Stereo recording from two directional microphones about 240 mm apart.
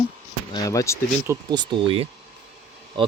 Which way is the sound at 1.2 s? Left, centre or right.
Centre.